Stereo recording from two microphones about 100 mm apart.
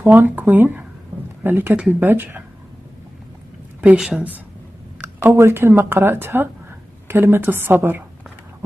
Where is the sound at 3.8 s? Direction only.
10° right (ahead or behind).